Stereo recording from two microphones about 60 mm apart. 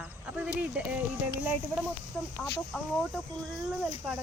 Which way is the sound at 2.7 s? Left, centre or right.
Centre.